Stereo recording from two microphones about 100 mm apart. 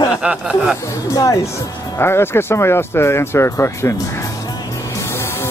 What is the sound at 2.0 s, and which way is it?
Speech, 25° left (ahead or behind).